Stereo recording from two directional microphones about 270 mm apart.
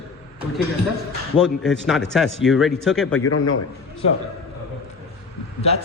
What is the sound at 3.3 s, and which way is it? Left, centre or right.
Speech, left.